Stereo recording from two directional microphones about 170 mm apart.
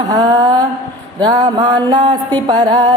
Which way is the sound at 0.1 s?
25° right (ahead or behind).